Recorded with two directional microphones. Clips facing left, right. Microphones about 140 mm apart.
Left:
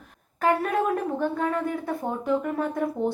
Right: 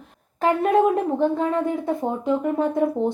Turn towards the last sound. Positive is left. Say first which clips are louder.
# right 5 dB
turn(degrees=-20)  # may be behind; listen again after turning